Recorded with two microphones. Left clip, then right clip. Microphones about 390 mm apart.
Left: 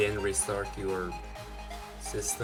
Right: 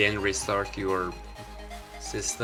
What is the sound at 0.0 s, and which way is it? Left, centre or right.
Speech, left.